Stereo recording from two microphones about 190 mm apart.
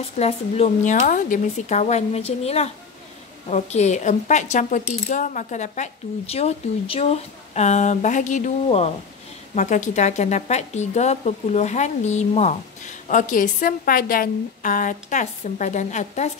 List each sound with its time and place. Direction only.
0.0 s a woman's voice: 30° left (ahead or behind)